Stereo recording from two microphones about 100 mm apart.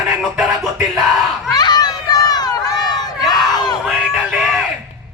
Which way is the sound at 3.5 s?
45° left (ahead or behind).